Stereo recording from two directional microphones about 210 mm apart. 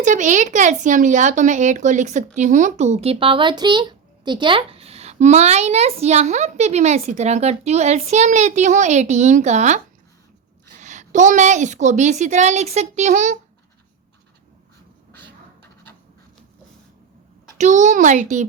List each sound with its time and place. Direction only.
0.0 s speech: 35° right (ahead or behind)
17.6 s speech: 35° right (ahead or behind)